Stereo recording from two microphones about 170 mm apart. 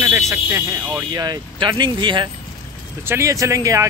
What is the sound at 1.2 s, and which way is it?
Speech, 25° right (ahead or behind).